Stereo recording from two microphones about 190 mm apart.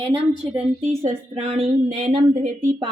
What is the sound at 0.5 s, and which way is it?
A woman's voice, 30° right (ahead or behind).